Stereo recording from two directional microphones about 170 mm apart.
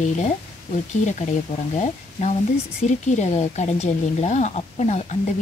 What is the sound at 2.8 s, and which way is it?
Speech, 45° left (ahead or behind).